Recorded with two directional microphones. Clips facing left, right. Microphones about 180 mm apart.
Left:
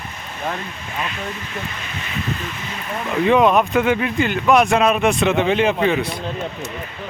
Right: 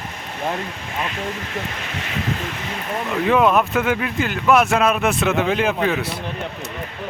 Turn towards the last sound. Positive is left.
turn(degrees=0)  # may be behind; listen again after turning